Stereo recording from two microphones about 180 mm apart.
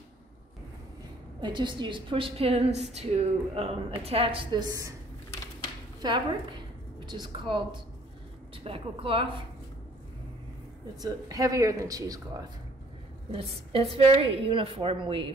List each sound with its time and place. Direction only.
1.4 s a woman's voice: 25° right (ahead or behind)
5.9 s a woman's voice: 25° right (ahead or behind)
11.0 s a woman's voice: 20° right (ahead or behind)
13.3 s a woman's voice: 30° right (ahead or behind)